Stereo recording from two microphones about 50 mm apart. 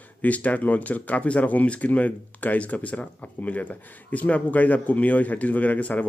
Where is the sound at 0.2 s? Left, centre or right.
Left.